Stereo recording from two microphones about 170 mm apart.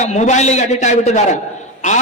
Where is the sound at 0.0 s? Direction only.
45° left (ahead or behind).